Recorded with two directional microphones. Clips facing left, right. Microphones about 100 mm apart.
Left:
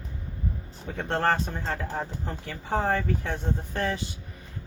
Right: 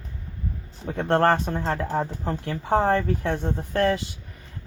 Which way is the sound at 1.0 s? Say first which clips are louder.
Right 6 dB; 55° right (ahead or behind).